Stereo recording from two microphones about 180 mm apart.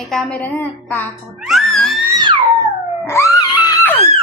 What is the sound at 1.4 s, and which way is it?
Music, centre (ahead or behind).